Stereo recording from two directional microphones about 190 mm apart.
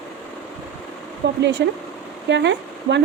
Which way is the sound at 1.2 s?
70° right (ahead or behind).